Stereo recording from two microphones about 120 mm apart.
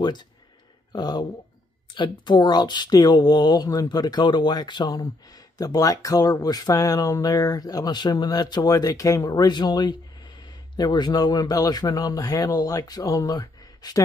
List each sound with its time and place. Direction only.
0.9 s speech: 35° left (ahead or behind)